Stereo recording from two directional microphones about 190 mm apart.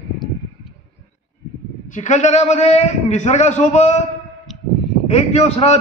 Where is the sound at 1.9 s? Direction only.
40° left (ahead or behind).